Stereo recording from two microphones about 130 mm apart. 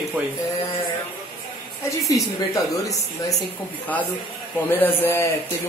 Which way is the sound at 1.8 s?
25° left (ahead or behind).